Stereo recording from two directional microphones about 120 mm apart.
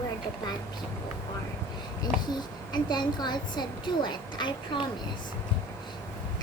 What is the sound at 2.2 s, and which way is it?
A child's voice, 35° left (ahead or behind).